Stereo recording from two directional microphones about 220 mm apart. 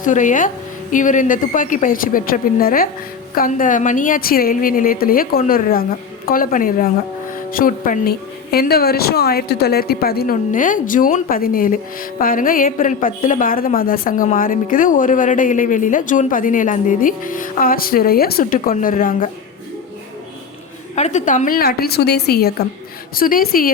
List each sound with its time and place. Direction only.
0.0 s a woman's voice: 35° left (ahead or behind)
20.9 s a woman's voice: 30° left (ahead or behind)